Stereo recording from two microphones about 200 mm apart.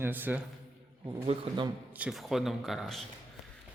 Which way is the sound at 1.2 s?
30° right (ahead or behind).